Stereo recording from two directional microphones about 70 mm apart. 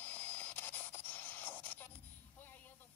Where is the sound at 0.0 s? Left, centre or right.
Left.